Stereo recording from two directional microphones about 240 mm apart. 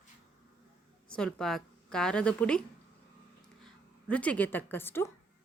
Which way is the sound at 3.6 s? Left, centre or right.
Centre.